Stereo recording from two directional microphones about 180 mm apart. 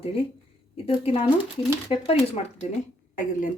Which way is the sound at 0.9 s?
30° left (ahead or behind).